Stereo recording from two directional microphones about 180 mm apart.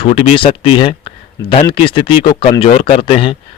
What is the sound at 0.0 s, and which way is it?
Speech, 30° left (ahead or behind).